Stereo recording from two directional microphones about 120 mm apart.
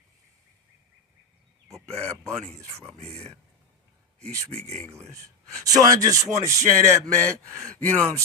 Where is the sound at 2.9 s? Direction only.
60° right (ahead or behind).